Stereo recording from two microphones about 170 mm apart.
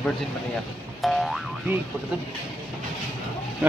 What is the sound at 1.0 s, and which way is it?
Boing, centre (ahead or behind).